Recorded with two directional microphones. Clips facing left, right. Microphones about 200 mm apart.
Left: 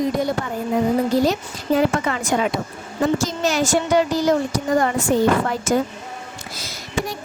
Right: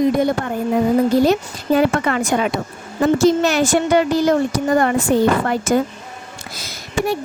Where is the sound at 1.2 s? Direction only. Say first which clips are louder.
Right 4 dB; 60° right (ahead or behind).